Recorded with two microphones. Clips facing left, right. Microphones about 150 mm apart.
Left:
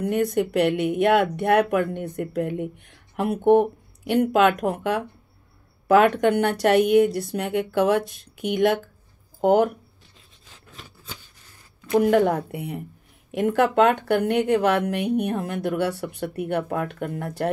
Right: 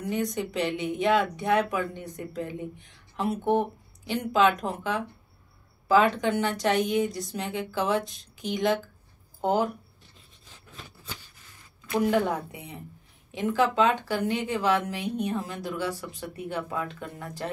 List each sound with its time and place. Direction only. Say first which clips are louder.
0.0 s speech: left 7 dB; 60° left (ahead or behind)
12.1 s speech: left 6 dB; 60° left (ahead or behind)